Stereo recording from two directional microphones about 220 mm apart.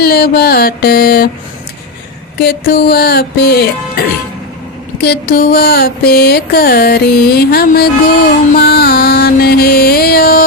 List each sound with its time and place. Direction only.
0.0 s mantra: 45° left (ahead or behind)
2.4 s mantra: 45° left (ahead or behind)
5.0 s mantra: 45° left (ahead or behind)
8.5 s music: 45° left (ahead or behind)